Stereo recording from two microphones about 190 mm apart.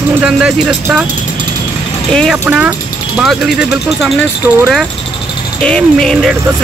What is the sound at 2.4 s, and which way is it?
Speech, 10° right (ahead or behind).